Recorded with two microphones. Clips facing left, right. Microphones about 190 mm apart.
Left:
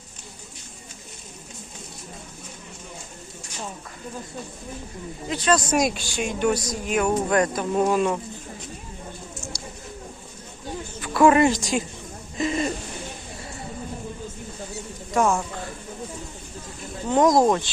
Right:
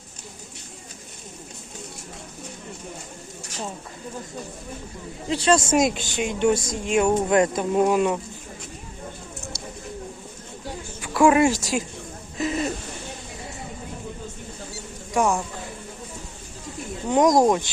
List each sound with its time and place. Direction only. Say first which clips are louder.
5.3 s a woman's voice: right 2 dB; 30° right (ahead or behind); by 8.2 s 10° right (ahead or behind)
11.0 s a woman's voice: even; 10° right (ahead or behind)
12.4 s a sound: left 1 dB; 5° right (ahead or behind)
15.1 s a man's voice: even; 15° right (ahead or behind)
17.1 s speech: even; 15° right (ahead or behind)